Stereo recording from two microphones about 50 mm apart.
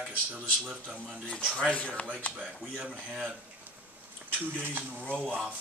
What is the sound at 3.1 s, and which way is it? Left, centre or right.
Speech, centre.